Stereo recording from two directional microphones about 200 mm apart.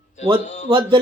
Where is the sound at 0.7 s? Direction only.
25° right (ahead or behind).